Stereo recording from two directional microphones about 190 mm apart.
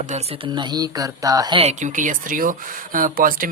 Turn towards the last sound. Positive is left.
turn(degrees=-45)  # may be behind; listen again after turning